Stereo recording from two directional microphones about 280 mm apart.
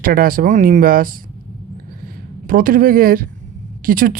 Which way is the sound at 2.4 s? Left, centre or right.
Right.